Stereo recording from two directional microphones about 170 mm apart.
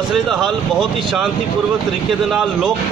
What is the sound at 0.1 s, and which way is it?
Speech, centre (ahead or behind).